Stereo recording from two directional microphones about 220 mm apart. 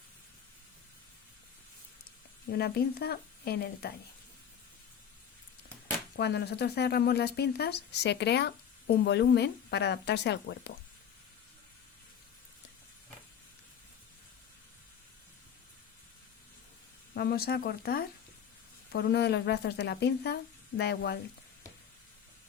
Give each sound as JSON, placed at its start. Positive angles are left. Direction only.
{"t": 2.5, "sound": "speech", "side_deg": 45}
{"t": 6.1, "sound": "speech", "side_deg": 50}
{"t": 17.2, "sound": "speech", "side_deg": 45}